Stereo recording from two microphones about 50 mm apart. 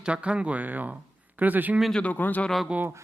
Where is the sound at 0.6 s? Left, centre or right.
Right.